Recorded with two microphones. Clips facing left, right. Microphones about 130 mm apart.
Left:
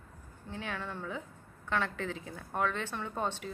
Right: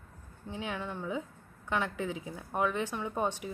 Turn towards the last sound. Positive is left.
turn(degrees=-15)  # may be behind; listen again after turning